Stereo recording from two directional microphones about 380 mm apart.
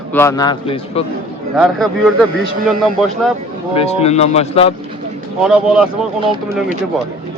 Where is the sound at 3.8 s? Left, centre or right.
Centre.